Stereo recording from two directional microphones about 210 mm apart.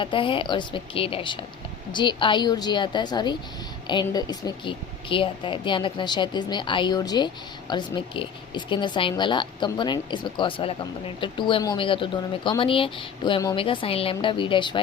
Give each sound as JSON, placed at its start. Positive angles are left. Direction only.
{"t": 0.0, "sound": "speech", "side_deg": 25}